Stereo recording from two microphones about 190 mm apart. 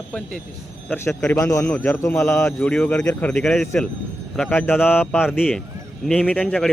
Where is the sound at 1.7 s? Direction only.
5° left (ahead or behind).